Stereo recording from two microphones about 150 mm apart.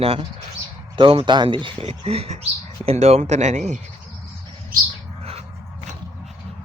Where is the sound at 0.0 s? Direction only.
40° right (ahead or behind).